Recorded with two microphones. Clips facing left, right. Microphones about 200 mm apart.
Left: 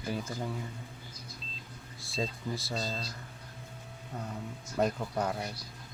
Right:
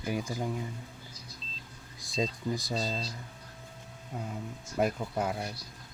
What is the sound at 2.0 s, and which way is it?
Speech, 15° right (ahead or behind).